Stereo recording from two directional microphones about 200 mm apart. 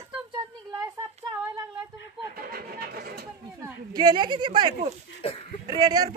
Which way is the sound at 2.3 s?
50° right (ahead or behind).